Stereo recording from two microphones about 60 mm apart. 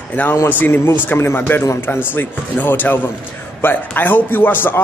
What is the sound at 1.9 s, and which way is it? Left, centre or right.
A man's voice, left.